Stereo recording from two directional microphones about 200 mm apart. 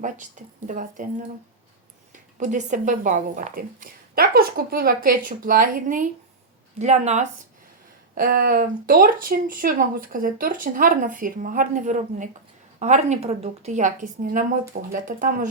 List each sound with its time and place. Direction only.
0.4 s a woman's voice: 40° right (ahead or behind)
2.1 s a woman's voice: 40° right (ahead or behind)
8.1 s a woman's voice: 45° right (ahead or behind)